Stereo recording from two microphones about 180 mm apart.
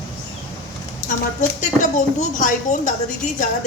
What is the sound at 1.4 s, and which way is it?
A woman's voice, 45° left (ahead or behind).